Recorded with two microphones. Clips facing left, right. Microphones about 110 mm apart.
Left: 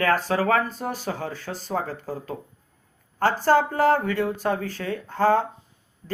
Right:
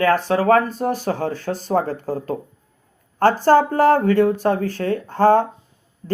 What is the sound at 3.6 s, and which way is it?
Speech, 50° right (ahead or behind).